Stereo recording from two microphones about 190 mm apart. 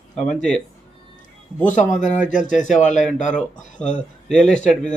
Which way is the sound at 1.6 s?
40° left (ahead or behind).